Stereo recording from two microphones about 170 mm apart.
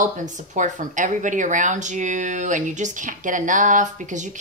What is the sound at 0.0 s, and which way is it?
Speech, 45° right (ahead or behind).